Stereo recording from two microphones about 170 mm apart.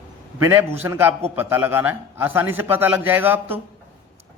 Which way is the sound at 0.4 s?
15° right (ahead or behind).